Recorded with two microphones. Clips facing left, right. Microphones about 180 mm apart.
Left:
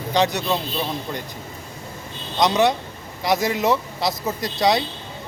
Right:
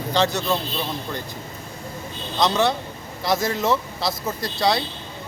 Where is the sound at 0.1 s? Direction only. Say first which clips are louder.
Left 1 dB; 15° left (ahead or behind).